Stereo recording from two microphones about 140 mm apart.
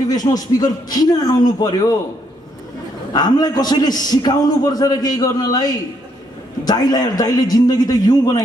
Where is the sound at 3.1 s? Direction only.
30° left (ahead or behind).